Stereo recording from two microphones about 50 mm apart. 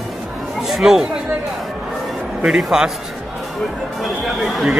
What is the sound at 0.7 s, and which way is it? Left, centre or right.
Speech, centre.